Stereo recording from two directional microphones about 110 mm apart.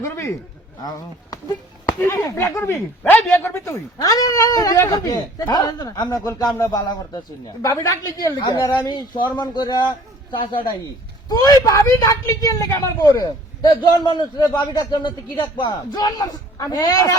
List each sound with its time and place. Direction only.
0.8 s a man's voice: 35° left (ahead or behind); by 3.8 s 20° left (ahead or behind)
4.0 s a man's voice: 35° left (ahead or behind)
6.2 s a man's voice: 30° left (ahead or behind)
11.3 s a man's voice: 35° left (ahead or behind)